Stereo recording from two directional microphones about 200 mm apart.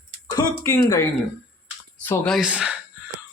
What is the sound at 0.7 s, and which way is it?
Speech, 15° left (ahead or behind).